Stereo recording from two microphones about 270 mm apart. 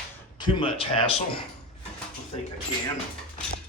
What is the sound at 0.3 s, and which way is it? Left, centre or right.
A man's voice, centre.